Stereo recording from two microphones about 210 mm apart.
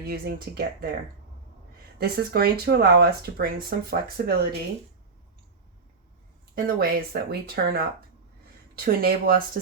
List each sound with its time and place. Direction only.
0.0 s speech: 50° right (ahead or behind)
2.0 s speech: 45° right (ahead or behind)
6.7 s speech: 45° right (ahead or behind)
8.8 s speech: 45° right (ahead or behind)